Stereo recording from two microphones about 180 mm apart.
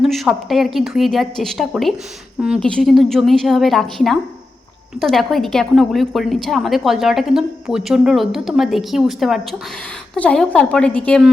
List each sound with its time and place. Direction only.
0.0 s a woman's voice: centre (ahead or behind)